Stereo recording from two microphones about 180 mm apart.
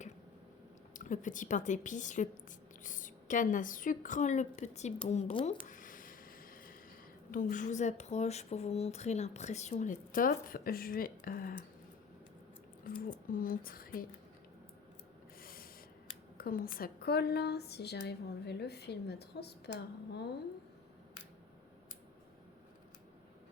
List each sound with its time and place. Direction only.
0.9 s a woman's voice: 45° left (ahead or behind)
5.6 s a sound: 45° left (ahead or behind)
7.3 s speech: 50° left (ahead or behind)
12.8 s a woman's voice: 50° left (ahead or behind)
15.4 s a sound: 55° left (ahead or behind)
16.4 s a woman's voice: 55° left (ahead or behind)